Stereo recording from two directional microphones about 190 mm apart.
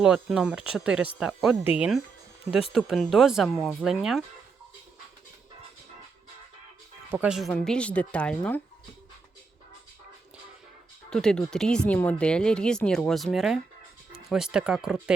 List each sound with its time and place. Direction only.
0.0 s speech: 5° right (ahead or behind)
7.1 s speech: 5° right (ahead or behind)
11.1 s speech: 5° left (ahead or behind)